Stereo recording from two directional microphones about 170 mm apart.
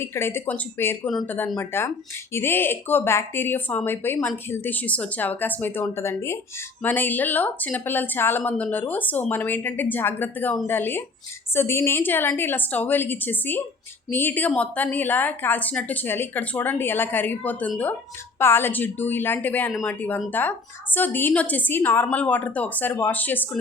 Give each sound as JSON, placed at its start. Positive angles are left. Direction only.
{"t": 0.0, "sound": "a woman's voice", "side_deg": 15}